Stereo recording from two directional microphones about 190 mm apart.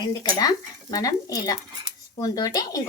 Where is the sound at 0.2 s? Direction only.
20° left (ahead or behind).